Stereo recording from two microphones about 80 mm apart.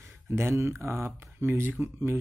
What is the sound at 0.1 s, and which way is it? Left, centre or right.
Speech, right.